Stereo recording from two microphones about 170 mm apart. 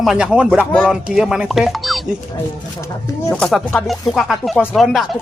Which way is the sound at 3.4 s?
5° left (ahead or behind).